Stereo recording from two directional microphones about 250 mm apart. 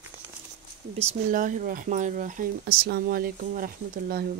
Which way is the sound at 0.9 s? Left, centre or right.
Right.